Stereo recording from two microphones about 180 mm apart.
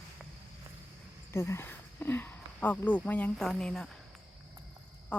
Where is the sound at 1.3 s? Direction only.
15° left (ahead or behind).